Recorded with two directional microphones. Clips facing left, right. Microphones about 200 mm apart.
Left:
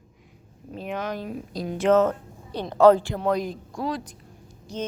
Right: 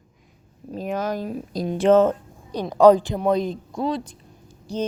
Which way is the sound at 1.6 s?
30° right (ahead or behind).